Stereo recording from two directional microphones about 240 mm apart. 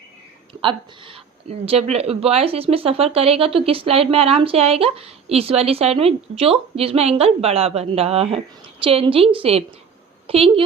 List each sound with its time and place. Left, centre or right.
0.6 s speech: right